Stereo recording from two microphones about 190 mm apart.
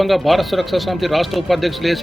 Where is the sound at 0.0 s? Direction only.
Centre (ahead or behind).